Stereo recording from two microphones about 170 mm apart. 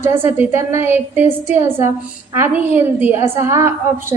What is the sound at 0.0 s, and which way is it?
A woman's voice, 15° right (ahead or behind).